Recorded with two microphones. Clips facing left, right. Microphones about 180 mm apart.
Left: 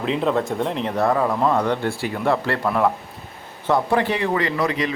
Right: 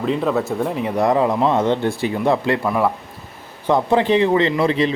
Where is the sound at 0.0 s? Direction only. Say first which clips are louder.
Right 2 dB; centre (ahead or behind); by 2.6 s 15° right (ahead or behind).